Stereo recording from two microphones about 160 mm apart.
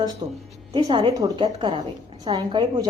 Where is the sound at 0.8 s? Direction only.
35° right (ahead or behind).